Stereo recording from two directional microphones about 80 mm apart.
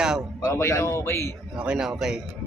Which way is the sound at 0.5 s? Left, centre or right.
Left.